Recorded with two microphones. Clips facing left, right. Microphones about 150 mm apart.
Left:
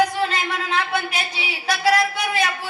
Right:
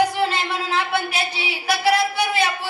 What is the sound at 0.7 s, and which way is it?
Speech, 30° right (ahead or behind).